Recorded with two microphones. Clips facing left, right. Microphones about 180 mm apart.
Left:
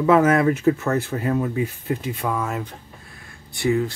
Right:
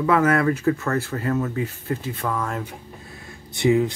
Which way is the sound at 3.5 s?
20° right (ahead or behind).